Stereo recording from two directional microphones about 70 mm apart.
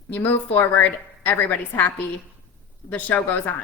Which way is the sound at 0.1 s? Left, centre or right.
Left.